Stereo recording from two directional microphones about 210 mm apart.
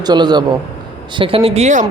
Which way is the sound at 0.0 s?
20° right (ahead or behind).